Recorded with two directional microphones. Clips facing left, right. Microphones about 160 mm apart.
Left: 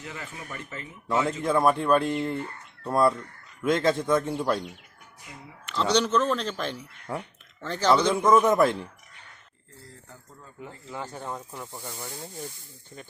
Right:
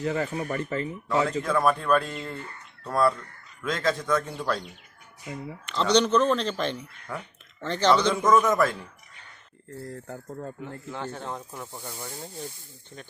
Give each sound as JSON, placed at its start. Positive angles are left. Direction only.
{"t": 0.0, "sound": "speech", "side_deg": -40}
{"t": 1.0, "sound": "speech", "side_deg": 25}
{"t": 5.2, "sound": "speech", "side_deg": -50}
{"t": 5.6, "sound": "speech", "side_deg": 5}
{"t": 7.1, "sound": "speech", "side_deg": 35}
{"t": 7.6, "sound": "speech", "side_deg": 5}
{"t": 8.3, "sound": "speech", "side_deg": 25}
{"t": 9.8, "sound": "speech", "side_deg": -55}
{"t": 10.6, "sound": "speech", "side_deg": 10}
{"t": 11.7, "sound": "speech", "side_deg": 0}